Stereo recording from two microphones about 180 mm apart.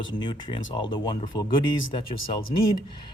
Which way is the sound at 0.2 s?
25° left (ahead or behind).